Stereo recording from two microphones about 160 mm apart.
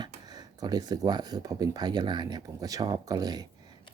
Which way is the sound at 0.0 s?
25° right (ahead or behind).